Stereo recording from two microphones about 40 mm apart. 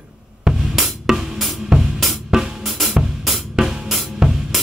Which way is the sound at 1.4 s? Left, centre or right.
Centre.